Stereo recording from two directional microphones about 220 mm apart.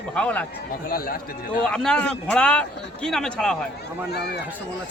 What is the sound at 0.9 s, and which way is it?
Speech, 40° left (ahead or behind).